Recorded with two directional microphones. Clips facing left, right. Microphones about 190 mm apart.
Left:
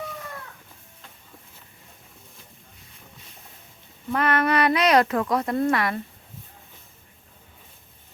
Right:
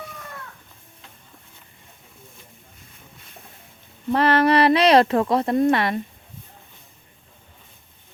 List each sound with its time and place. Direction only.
4.1 s speech: 30° right (ahead or behind)